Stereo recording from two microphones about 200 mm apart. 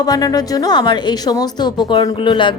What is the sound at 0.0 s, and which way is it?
A woman's voice, 20° left (ahead or behind).